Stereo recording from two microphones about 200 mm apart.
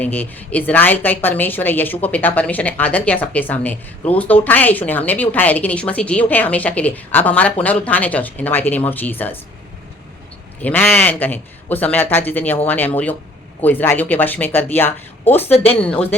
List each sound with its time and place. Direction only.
0.0 s a woman's voice: 10° left (ahead or behind)
10.6 s a woman's voice: 10° left (ahead or behind)
15.5 s speech: 30° left (ahead or behind)
15.8 s speech: 5° left (ahead or behind)